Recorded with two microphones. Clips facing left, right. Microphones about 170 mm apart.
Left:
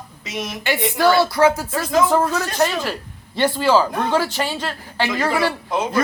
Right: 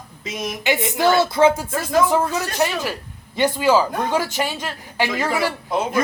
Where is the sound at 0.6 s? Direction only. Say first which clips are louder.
Left 1 dB; 20° right (ahead or behind).